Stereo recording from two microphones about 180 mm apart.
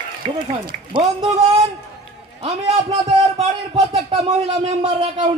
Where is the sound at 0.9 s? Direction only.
25° right (ahead or behind).